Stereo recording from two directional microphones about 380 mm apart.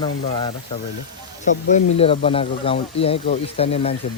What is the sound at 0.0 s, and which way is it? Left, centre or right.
Speech, centre.